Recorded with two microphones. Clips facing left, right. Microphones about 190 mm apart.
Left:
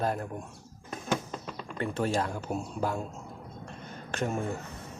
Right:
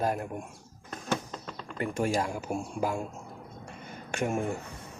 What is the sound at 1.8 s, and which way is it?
Speech, 10° right (ahead or behind).